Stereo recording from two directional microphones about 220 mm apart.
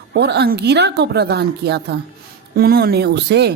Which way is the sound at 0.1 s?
50° right (ahead or behind).